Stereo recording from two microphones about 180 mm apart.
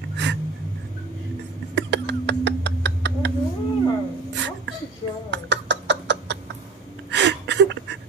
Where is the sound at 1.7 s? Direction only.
70° right (ahead or behind).